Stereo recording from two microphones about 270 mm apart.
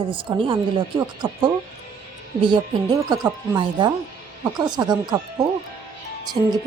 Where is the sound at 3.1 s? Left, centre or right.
Centre.